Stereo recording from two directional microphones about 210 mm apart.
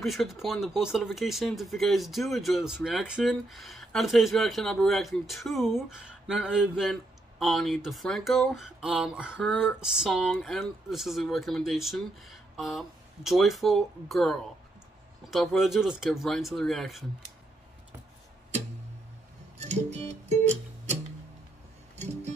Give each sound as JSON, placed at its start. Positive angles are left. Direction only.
{"t": 0.0, "sound": "speech", "side_deg": 0}
{"t": 19.6, "sound": "music", "side_deg": -30}